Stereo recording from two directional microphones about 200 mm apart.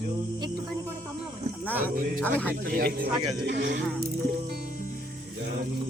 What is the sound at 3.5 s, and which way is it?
Speech, 65° right (ahead or behind).